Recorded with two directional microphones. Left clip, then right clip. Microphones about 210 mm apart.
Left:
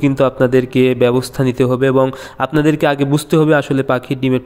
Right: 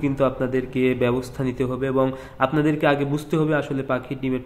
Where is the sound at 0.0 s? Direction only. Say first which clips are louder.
Left 8 dB; 40° left (ahead or behind).